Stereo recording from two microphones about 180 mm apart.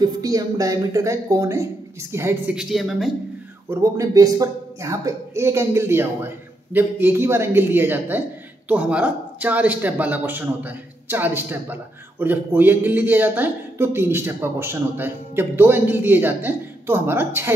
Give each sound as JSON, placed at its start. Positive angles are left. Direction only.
{"t": 0.0, "sound": "speech", "side_deg": -20}
{"t": 3.7, "sound": "speech", "side_deg": -15}